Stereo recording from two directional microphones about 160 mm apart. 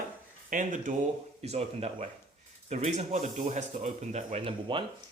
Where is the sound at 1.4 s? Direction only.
40° right (ahead or behind).